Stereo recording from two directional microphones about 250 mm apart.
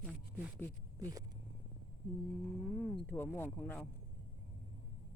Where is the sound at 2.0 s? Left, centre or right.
Centre.